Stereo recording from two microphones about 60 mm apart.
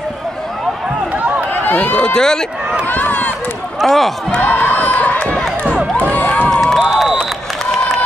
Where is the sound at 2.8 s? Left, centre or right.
Left.